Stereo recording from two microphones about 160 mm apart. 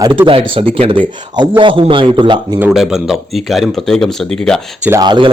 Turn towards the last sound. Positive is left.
turn(degrees=-30)  # may be behind; listen again after turning